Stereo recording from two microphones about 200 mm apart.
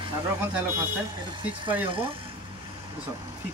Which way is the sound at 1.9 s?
25° right (ahead or behind).